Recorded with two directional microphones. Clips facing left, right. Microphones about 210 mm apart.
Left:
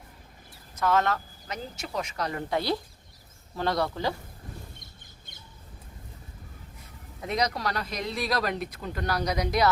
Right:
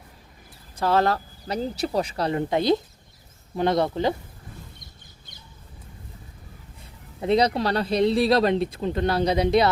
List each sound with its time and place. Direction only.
0.8 s speech: 30° right (ahead or behind)
7.2 s speech: 30° right (ahead or behind)